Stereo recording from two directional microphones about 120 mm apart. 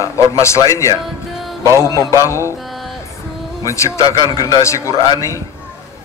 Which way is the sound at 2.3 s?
25° left (ahead or behind).